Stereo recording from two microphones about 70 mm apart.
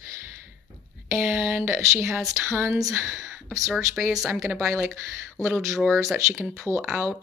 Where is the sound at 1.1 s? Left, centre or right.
Right.